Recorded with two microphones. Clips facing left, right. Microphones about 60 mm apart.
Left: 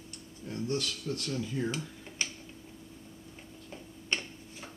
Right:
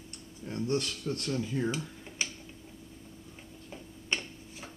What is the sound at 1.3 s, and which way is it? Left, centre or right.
Speech, centre.